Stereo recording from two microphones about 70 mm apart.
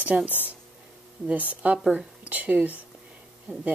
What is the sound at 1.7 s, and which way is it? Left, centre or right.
Speech, centre.